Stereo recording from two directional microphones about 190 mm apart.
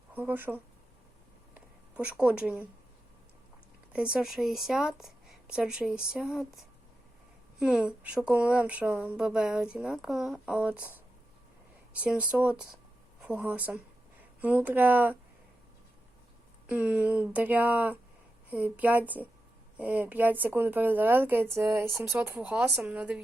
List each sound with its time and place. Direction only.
0.1 s a woman's voice: 10° right (ahead or behind)
1.5 s a sound: 5° right (ahead or behind)
3.9 s a woman's voice: 5° right (ahead or behind)
16.6 s a woman's voice: 5° right (ahead or behind)